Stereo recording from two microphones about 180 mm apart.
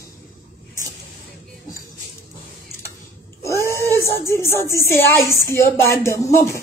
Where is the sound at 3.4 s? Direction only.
15° left (ahead or behind).